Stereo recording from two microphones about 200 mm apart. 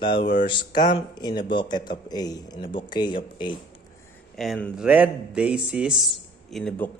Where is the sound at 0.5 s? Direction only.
25° left (ahead or behind).